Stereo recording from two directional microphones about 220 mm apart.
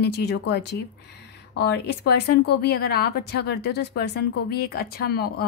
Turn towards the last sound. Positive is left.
turn(degrees=45)  # may be behind; listen again after turning